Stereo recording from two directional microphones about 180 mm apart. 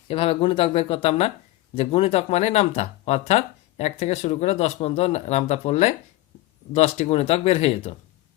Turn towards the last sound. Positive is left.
turn(degrees=35)  # may be behind; listen again after turning